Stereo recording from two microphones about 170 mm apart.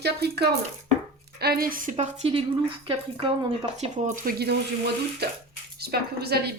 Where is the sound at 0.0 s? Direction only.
70° right (ahead or behind); by 3.8 s 30° right (ahead or behind).